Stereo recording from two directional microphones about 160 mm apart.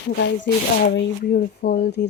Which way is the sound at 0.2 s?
90° left.